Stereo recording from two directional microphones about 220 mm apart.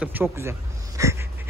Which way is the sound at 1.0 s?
10° right (ahead or behind).